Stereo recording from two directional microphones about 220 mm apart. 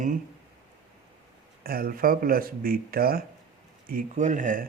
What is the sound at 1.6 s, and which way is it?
Speech, 40° right (ahead or behind).